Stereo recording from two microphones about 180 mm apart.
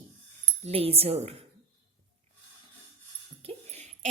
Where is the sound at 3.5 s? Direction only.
40° right (ahead or behind).